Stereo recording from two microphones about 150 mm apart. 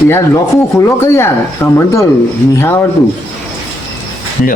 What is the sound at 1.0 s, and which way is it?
Speech, 15° left (ahead or behind).